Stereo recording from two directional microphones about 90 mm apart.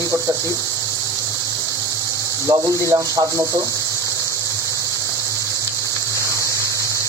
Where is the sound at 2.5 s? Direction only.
40° right (ahead or behind).